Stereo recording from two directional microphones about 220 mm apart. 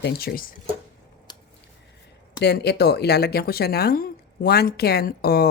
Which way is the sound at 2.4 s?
50° left (ahead or behind).